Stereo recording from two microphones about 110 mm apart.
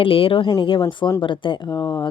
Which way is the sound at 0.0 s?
55° left (ahead or behind).